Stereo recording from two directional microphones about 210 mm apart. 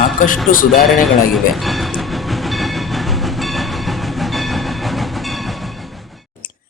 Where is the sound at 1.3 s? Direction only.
Centre (ahead or behind).